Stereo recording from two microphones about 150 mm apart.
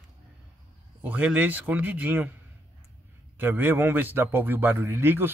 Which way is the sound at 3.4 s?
15° right (ahead or behind).